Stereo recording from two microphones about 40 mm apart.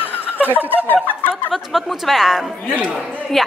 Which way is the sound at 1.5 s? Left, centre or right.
Centre.